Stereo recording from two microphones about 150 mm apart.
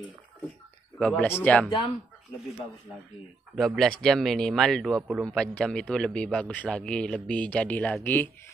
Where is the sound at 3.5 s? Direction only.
Centre (ahead or behind).